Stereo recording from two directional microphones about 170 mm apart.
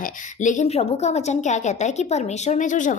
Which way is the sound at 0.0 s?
45° left (ahead or behind).